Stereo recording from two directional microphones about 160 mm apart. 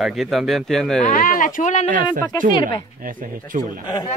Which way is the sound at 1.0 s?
60° left (ahead or behind).